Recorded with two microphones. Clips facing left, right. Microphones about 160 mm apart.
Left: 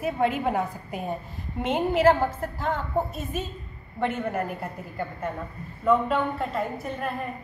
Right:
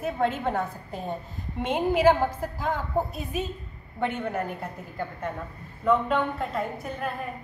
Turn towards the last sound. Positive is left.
turn(degrees=0)  # may be behind; listen again after turning